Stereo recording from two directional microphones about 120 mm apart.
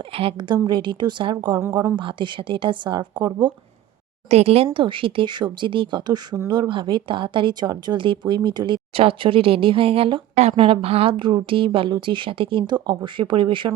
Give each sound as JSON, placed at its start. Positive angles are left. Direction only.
{"t": 0.1, "sound": "a woman's voice", "side_deg": -50}
{"t": 4.3, "sound": "speech", "side_deg": -60}